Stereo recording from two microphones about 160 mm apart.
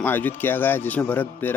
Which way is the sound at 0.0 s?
10° left (ahead or behind).